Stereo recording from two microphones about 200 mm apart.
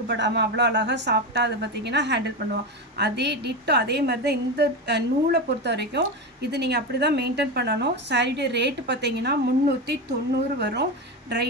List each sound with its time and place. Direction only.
0.1 s a woman's voice: 60° right (ahead or behind)